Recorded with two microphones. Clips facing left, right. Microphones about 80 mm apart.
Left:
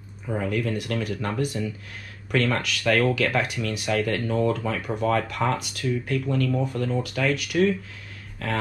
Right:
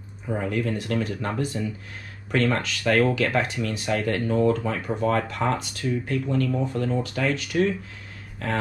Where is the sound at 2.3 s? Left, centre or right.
Centre.